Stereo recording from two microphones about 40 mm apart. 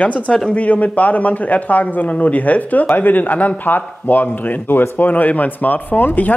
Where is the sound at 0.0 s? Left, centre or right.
Left.